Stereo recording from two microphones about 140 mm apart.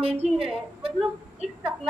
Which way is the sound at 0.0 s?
45° right (ahead or behind).